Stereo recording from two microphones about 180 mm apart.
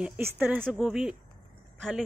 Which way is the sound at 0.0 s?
10° right (ahead or behind).